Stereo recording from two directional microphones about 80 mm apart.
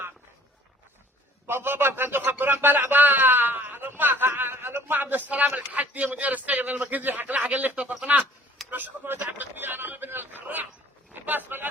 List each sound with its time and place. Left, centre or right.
1.5 s a man's voice: right